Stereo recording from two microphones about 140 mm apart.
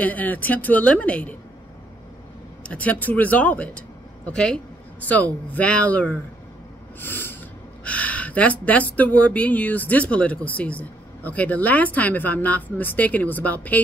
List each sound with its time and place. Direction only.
0.0 s speech: 10° left (ahead or behind)
2.6 s speech: 10° left (ahead or behind)
7.0 s snort: 15° left (ahead or behind)
7.8 s speech: 10° left (ahead or behind)